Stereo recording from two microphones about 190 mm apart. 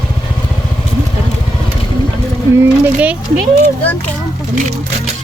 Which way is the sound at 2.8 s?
5° right (ahead or behind).